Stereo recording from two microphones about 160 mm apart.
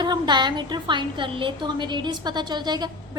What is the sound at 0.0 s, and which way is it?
A woman's voice, 25° right (ahead or behind).